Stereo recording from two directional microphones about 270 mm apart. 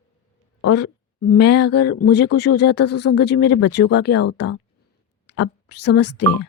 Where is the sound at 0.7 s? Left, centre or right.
Left.